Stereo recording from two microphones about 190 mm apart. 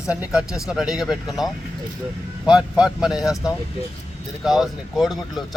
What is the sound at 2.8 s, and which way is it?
Speech, 5° right (ahead or behind).